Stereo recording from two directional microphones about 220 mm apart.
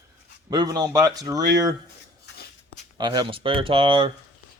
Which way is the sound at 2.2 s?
45° left (ahead or behind).